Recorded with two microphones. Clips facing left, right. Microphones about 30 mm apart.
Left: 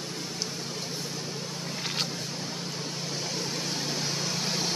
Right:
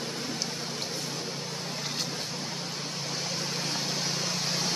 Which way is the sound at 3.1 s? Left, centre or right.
Centre.